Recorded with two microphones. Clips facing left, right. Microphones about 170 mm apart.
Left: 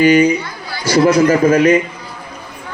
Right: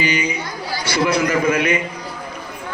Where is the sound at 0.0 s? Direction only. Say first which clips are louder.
Left 11 dB; 50° left (ahead or behind).